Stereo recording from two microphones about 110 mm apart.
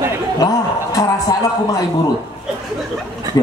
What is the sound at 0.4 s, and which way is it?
Music, 35° left (ahead or behind).